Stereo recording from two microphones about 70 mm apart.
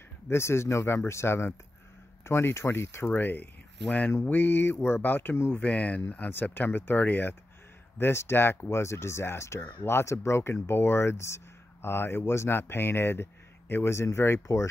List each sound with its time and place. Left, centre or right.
0.3 s speech: left
3.1 s speech: left
5.6 s speech: centre
8.0 s speech: left